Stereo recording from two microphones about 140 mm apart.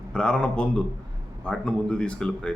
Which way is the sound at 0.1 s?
5° left (ahead or behind).